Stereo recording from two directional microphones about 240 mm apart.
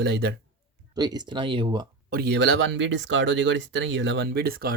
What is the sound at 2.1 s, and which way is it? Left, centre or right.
Speech, right.